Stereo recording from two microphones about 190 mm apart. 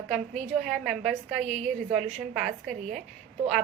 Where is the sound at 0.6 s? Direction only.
Centre (ahead or behind).